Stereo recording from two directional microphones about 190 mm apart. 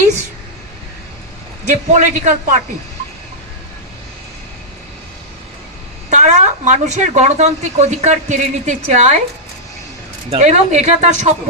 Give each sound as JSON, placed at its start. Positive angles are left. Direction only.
{"t": 1.7, "sound": "speech", "side_deg": -40}
{"t": 6.1, "sound": "speech", "side_deg": -40}
{"t": 10.2, "sound": "speech", "side_deg": -35}